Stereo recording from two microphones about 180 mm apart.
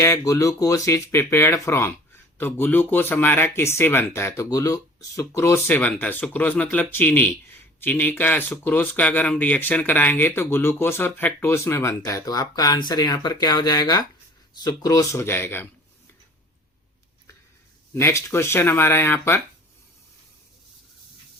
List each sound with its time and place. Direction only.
0.0 s speech: 15° left (ahead or behind)
18.0 s speech: 15° left (ahead or behind)